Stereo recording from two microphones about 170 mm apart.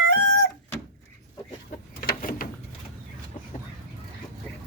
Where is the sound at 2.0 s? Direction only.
55° left (ahead or behind).